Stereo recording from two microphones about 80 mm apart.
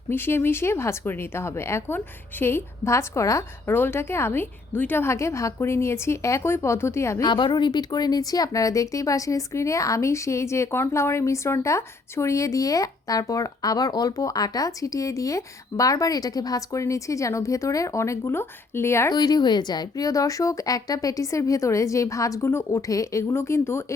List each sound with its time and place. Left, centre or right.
0.1 s a woman's voice: left
3.7 s a woman's voice: left
7.3 s speech: left
19.0 s speech: left
22.4 s a woman's voice: left
22.9 s speech: left
23.3 s a woman's voice: left